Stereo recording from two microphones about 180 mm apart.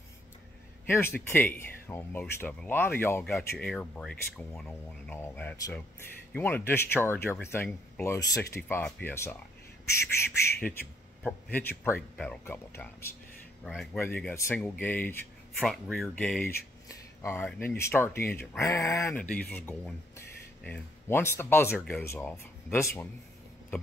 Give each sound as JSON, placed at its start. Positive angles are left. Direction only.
{"t": 0.8, "sound": "speech", "side_deg": 10}
{"t": 16.8, "sound": "a sound", "side_deg": 15}
{"t": 17.5, "sound": "speech", "side_deg": 10}